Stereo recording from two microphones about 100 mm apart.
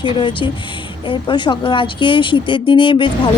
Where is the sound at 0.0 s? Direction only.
55° left (ahead or behind).